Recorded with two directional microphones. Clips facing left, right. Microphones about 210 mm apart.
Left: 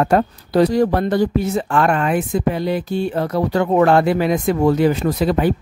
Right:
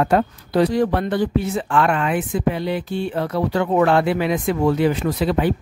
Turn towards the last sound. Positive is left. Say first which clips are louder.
# left 2 dB
turn(degrees=45)  # may be behind; listen again after turning